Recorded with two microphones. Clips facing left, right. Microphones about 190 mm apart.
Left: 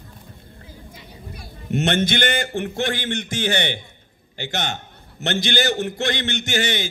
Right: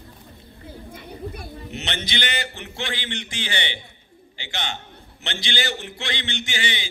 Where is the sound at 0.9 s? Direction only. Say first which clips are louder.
Right 9 dB; 55° right (ahead or behind).